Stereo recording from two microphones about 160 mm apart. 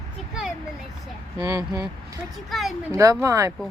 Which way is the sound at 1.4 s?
20° right (ahead or behind).